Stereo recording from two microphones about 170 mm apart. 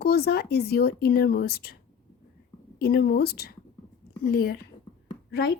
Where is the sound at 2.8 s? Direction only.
65° left (ahead or behind).